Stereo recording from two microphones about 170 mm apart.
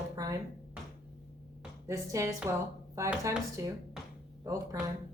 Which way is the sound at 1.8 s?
20° right (ahead or behind).